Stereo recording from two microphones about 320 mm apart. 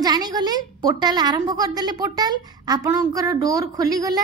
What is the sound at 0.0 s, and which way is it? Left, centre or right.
A woman's voice, centre.